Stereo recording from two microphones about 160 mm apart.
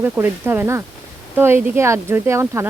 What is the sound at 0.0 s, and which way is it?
Speech, 15° right (ahead or behind).